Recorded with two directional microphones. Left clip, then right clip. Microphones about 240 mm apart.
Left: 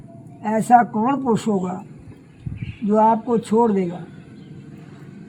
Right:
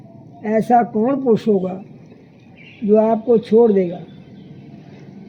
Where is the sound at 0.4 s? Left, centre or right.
Left.